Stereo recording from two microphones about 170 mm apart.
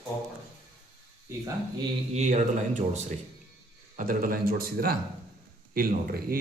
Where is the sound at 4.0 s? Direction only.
55° right (ahead or behind).